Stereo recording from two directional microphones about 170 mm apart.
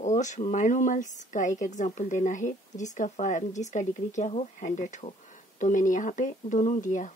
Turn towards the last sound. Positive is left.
turn(degrees=50)  # may be behind; listen again after turning